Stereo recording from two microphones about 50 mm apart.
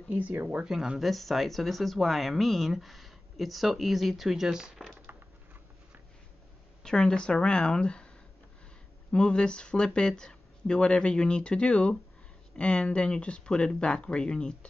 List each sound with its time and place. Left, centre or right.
0.1 s speech: right
0.7 s speech: centre
6.8 s speech: centre
9.1 s speech: centre